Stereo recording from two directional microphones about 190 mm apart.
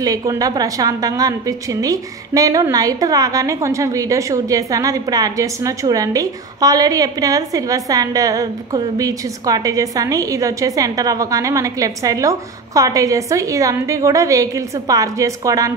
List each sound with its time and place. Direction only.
0.0 s a woman's voice: 20° right (ahead or behind)